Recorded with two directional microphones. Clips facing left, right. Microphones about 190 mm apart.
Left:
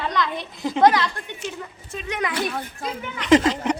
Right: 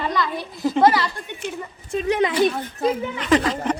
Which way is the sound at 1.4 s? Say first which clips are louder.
Right 3 dB; 55° right (ahead or behind).